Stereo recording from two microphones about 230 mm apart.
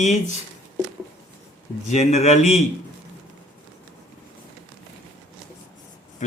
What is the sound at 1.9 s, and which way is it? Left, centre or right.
Speech, left.